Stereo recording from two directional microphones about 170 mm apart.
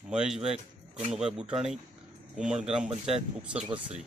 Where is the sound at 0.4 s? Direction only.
35° right (ahead or behind).